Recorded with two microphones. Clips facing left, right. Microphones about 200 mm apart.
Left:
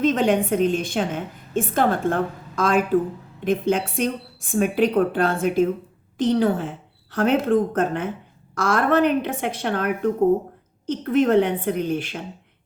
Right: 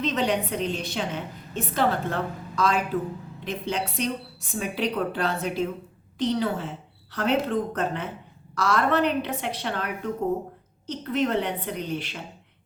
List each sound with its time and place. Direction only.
0.0 s a woman's voice: 50° left (ahead or behind)